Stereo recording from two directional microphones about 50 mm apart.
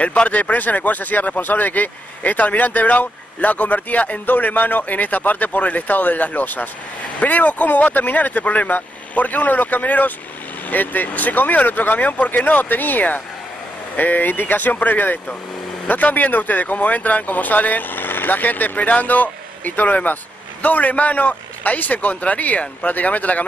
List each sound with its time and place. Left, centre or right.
0.0 s speech: left